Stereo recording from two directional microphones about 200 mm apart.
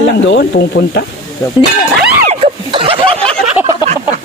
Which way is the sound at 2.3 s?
30° right (ahead or behind).